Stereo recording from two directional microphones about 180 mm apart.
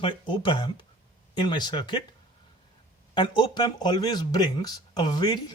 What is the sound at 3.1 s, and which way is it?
Speech, 25° left (ahead or behind).